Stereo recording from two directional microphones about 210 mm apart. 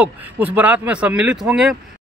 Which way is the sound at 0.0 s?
5° right (ahead or behind).